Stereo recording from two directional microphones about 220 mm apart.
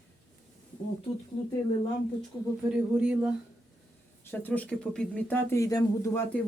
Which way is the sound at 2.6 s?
5° right (ahead or behind).